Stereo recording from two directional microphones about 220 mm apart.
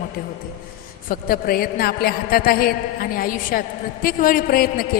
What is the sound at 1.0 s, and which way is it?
A woman's voice, 40° left (ahead or behind).